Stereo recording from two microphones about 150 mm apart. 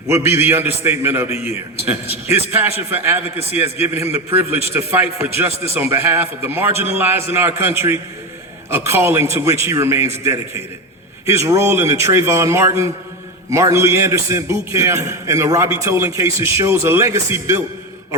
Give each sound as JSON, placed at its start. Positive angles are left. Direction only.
{"t": 0.1, "sound": "a man's voice", "side_deg": -20}